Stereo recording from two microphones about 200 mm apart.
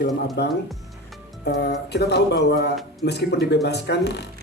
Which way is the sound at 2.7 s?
Centre (ahead or behind).